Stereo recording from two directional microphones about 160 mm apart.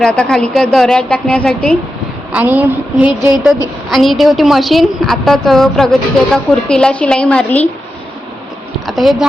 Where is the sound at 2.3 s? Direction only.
10° right (ahead or behind).